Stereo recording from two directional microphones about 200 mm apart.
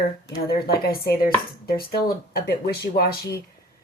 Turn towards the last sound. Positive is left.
turn(degrees=50)  # may be behind; listen again after turning